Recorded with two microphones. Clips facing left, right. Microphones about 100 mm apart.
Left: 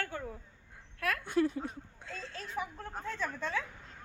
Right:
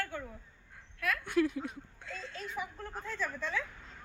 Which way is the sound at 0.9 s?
45° left (ahead or behind).